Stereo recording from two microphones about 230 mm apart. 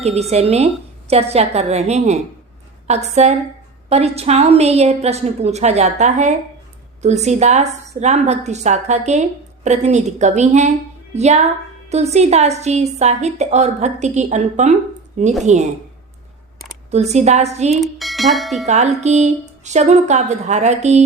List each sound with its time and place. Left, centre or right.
0.0 s a woman's voice: right
16.9 s a woman's voice: right
17.7 s speech: centre
18.6 s a woman's voice: right